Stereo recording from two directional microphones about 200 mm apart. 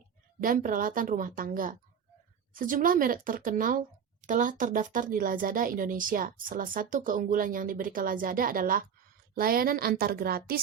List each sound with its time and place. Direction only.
0.4 s a woman's voice: 45° right (ahead or behind)